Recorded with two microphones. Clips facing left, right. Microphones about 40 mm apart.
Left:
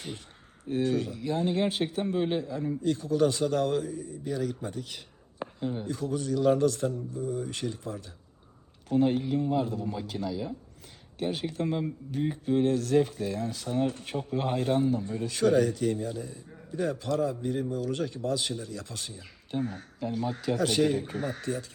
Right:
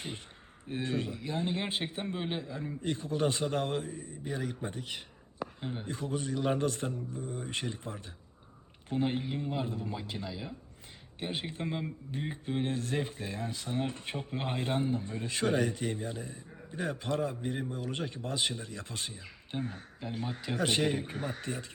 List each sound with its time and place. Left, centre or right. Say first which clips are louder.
0.6 s a man's voice: left 6 dB; right
21.4 s speech: left 5 dB; right